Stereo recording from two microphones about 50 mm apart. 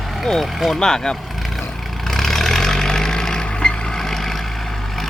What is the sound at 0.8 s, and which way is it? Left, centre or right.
Speech, centre.